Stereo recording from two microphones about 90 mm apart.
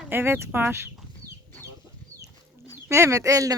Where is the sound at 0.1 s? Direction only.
25° right (ahead or behind).